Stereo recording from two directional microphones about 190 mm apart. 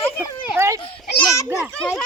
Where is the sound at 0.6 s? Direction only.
15° right (ahead or behind).